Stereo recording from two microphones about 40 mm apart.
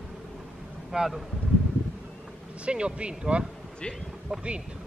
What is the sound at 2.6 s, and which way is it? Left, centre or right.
Speech, right.